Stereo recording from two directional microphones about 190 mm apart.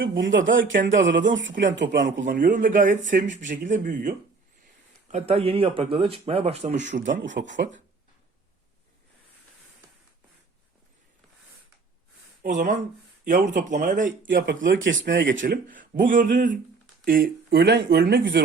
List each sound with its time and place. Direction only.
0.0 s speech: 75° right (ahead or behind)
2.2 s speech: 45° right (ahead or behind)
5.1 s speech: 35° right (ahead or behind)
7.1 s speech: 70° right (ahead or behind)
12.4 s speech: 45° right (ahead or behind)
14.3 s speech: 70° right (ahead or behind)
15.4 s speech: 45° right (ahead or behind); by 18.4 s 60° right (ahead or behind)